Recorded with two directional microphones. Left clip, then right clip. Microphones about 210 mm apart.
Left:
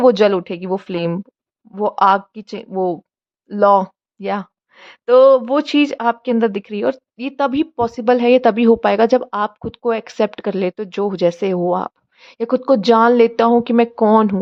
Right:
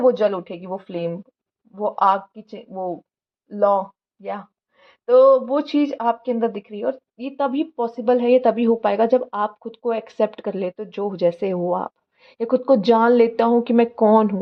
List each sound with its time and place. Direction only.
0.0 s speech: 40° left (ahead or behind); by 14.3 s 15° left (ahead or behind)